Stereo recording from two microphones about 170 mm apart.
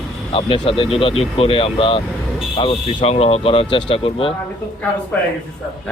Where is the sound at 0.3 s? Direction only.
30° left (ahead or behind).